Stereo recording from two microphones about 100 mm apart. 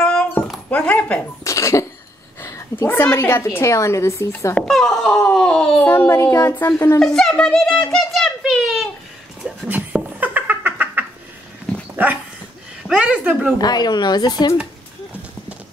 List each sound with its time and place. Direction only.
0.0 s dog: 10° left (ahead or behind)
0.7 s speech: 15° left (ahead or behind)
1.4 s a woman's voice: 30° left (ahead or behind)
4.6 s speech: 5° left (ahead or behind)
5.3 s a sound: 10° left (ahead or behind)
5.9 s a child's voice: 25° left (ahead or behind)
7.2 s a sound: 10° left (ahead or behind)
9.7 s cat: 15° right (ahead or behind)
12.0 s dog: 20° right (ahead or behind)
12.8 s speech: 10° right (ahead or behind)
13.6 s speech: 45° left (ahead or behind)